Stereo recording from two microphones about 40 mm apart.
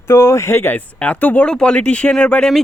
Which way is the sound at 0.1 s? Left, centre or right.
Left.